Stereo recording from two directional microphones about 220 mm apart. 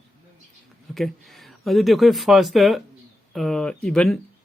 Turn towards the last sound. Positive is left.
turn(degrees=0)  # may be behind; listen again after turning